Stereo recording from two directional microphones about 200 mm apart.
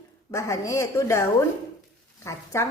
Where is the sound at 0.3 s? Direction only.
15° left (ahead or behind).